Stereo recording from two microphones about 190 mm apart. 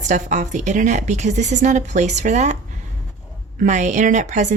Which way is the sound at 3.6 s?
40° right (ahead or behind).